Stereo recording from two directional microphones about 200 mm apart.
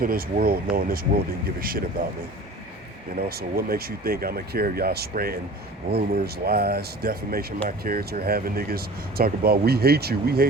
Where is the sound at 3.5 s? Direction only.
50° right (ahead or behind).